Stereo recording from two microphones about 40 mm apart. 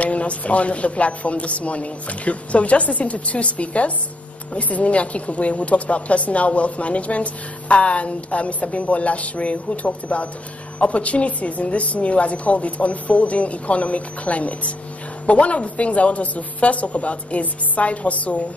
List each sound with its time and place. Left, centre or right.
0.0 s a woman's voice: left